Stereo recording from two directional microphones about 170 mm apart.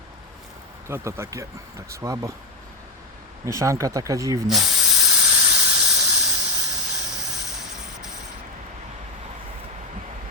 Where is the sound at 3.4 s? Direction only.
20° right (ahead or behind).